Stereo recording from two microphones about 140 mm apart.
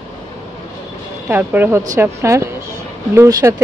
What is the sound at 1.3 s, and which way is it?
Speech, 15° right (ahead or behind).